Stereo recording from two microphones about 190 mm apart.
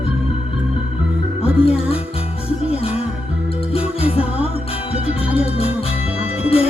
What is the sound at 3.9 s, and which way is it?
Music, 30° left (ahead or behind).